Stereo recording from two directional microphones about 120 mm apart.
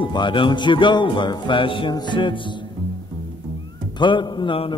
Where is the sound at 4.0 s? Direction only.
40° left (ahead or behind).